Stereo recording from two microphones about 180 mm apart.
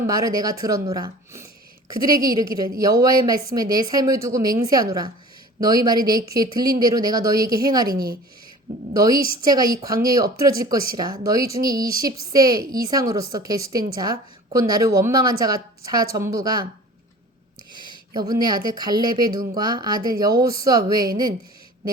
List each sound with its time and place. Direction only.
0.1 s a woman's voice: 20° right (ahead or behind)
2.1 s a woman's voice: 50° right (ahead or behind)
2.7 s a woman's voice: 20° right (ahead or behind)
7.9 s speech: 55° right (ahead or behind)
8.9 s a woman's voice: 20° right (ahead or behind)
17.7 s a sound: 25° right (ahead or behind)
18.1 s a woman's voice: 20° right (ahead or behind)